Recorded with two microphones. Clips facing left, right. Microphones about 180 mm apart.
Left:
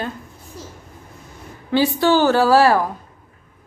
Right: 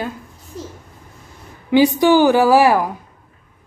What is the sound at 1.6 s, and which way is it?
Speech, 15° right (ahead or behind).